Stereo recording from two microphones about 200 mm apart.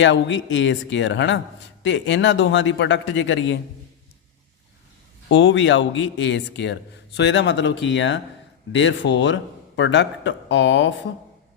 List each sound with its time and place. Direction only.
0.0 s a man's voice: 65° left (ahead or behind)
5.3 s a man's voice: 70° left (ahead or behind)